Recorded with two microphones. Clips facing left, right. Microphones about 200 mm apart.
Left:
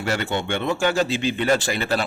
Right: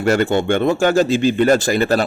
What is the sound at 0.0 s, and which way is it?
Speech, 45° right (ahead or behind).